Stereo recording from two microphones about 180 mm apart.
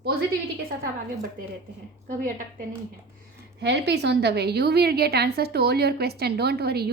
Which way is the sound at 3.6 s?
70° right (ahead or behind).